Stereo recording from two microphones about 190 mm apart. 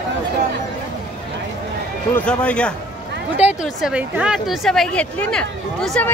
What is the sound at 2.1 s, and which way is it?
A woman's voice, 5° left (ahead or behind).